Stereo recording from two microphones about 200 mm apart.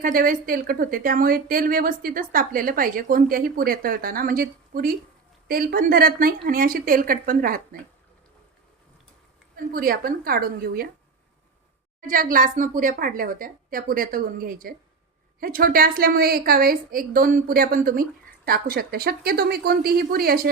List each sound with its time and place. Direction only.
0.0 s a woman's voice: 45° right (ahead or behind)
9.7 s a woman's voice: 45° right (ahead or behind)
11.9 s a woman's voice: 45° right (ahead or behind)